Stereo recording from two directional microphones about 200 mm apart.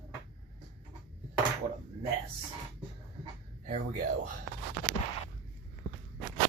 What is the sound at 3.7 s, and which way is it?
Speech, 35° right (ahead or behind).